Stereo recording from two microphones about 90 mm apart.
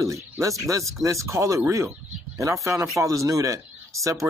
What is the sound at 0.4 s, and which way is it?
Speech, 35° right (ahead or behind).